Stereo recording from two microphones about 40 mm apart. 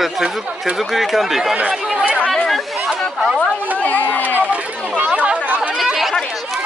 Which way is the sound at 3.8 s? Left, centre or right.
Left.